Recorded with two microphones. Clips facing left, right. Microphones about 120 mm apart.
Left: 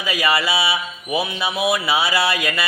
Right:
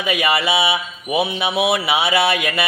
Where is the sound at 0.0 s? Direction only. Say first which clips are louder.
Right 2 dB; 25° right (ahead or behind).